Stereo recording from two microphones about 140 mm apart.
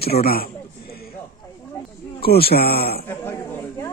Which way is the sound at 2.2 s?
90° left.